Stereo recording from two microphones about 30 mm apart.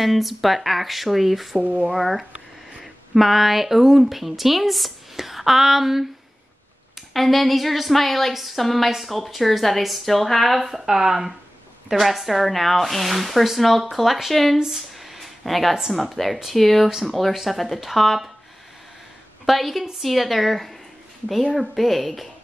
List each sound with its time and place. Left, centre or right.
0.0 s a woman's voice: centre
1.6 s speech: right
1.9 s a woman's voice: centre
7.0 s a woman's voice: centre
10.6 s speech: centre
11.9 s a woman's voice: centre
15.0 s a sound: centre
15.9 s a woman's voice: centre
19.4 s a woman's voice: centre